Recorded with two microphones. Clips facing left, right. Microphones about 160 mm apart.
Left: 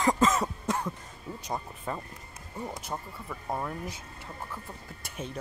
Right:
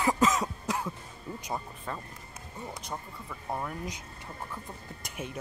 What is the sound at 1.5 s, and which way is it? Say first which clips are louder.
Speech: left 3 dB; 10° left (ahead or behind).